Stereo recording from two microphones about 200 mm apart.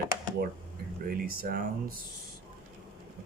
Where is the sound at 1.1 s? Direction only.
45° right (ahead or behind).